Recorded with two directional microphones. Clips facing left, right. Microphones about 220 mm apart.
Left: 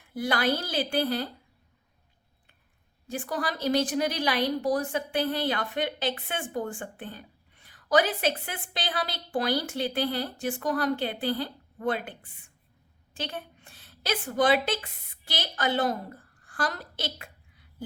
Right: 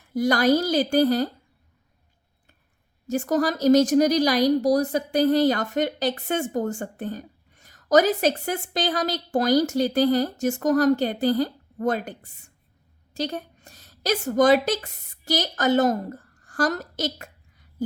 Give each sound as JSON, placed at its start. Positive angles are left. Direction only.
{"t": 0.1, "sound": "a woman's voice", "side_deg": -40}
{"t": 3.1, "sound": "a woman's voice", "side_deg": -45}